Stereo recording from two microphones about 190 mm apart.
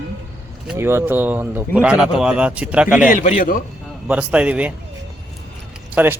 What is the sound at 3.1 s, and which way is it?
Speech, 45° left (ahead or behind).